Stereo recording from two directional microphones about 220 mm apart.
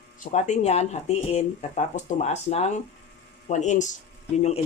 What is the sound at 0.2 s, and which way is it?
Speech, 35° left (ahead or behind).